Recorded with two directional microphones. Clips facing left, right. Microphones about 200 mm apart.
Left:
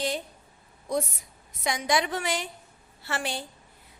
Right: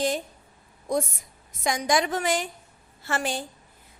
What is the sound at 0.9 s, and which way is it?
A woman's voice, 50° right (ahead or behind).